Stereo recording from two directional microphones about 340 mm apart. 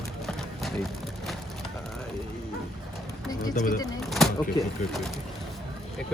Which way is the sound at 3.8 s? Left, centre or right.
Centre.